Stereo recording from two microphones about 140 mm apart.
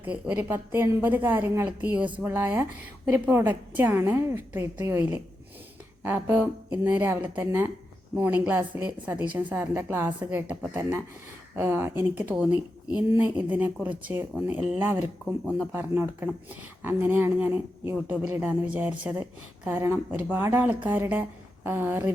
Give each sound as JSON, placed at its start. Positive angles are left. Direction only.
{"t": 0.0, "sound": "speech", "side_deg": -10}
{"t": 15.7, "sound": "speech", "side_deg": -15}